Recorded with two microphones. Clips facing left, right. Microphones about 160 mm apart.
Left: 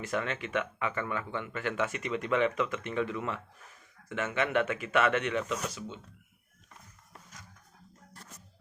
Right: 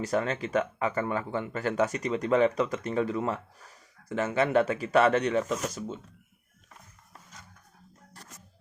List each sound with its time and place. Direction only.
0.0 s speech: 35° right (ahead or behind)